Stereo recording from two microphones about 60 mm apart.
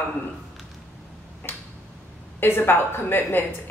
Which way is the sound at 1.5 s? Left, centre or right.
Left.